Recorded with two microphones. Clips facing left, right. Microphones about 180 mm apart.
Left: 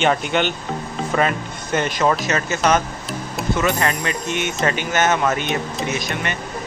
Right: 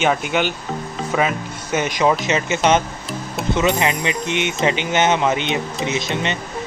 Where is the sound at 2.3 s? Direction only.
20° right (ahead or behind).